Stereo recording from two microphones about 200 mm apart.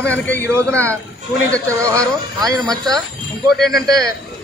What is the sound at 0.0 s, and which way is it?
Speech, 5° left (ahead or behind).